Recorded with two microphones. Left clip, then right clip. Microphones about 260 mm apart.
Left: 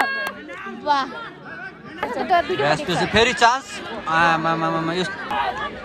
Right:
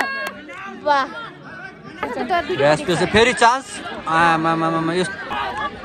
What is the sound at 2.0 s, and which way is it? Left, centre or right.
Speech, left.